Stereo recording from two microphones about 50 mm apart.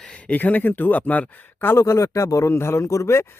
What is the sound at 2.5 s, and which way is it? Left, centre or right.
Speech, left.